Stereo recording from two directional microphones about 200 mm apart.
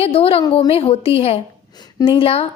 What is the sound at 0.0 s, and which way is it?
A woman's voice, 30° left (ahead or behind).